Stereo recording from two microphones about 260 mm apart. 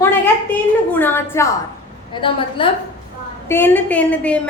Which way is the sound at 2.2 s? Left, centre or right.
Centre.